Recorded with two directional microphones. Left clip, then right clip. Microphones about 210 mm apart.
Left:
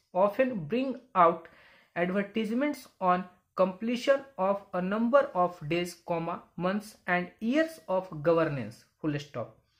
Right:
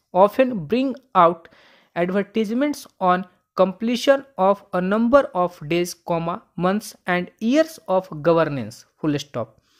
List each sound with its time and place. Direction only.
0.1 s speech: 45° right (ahead or behind)